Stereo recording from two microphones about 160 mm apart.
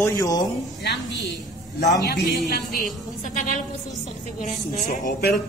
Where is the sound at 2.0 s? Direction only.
85° left.